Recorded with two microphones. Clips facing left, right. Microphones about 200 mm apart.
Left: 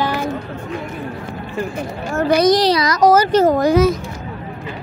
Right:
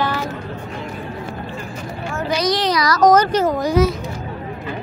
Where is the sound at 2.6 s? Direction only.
30° left (ahead or behind).